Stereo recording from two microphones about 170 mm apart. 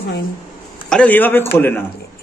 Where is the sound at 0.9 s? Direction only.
10° left (ahead or behind).